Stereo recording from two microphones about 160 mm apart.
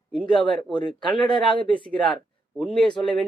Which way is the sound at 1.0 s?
30° left (ahead or behind).